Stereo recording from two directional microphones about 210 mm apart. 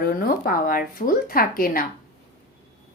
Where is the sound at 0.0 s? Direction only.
45° left (ahead or behind).